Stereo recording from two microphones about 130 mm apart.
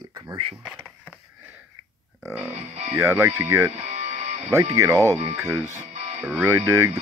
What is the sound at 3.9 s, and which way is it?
Music, 60° right (ahead or behind).